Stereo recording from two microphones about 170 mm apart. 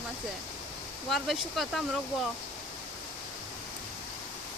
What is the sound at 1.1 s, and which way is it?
Speech, centre (ahead or behind).